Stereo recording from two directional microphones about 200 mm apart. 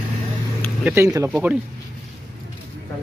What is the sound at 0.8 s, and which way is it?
Speech, 15° right (ahead or behind).